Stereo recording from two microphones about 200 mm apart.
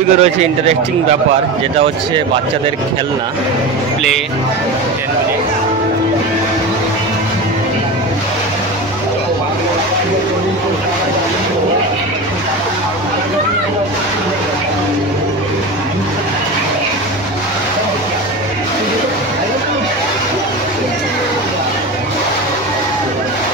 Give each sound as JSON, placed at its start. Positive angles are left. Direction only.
{"t": 0.2, "sound": "speech", "side_deg": -30}